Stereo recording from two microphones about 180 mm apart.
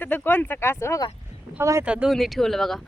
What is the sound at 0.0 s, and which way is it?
Speech, 10° left (ahead or behind).